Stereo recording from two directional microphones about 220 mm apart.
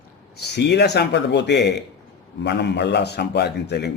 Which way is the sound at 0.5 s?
50° left (ahead or behind).